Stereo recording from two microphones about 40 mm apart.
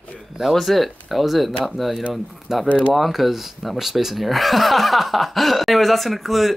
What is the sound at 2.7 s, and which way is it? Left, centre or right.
Speech, left.